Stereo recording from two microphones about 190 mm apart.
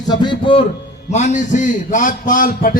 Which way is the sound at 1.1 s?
40° left (ahead or behind).